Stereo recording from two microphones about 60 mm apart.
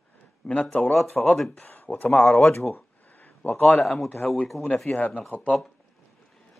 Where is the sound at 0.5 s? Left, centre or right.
Left.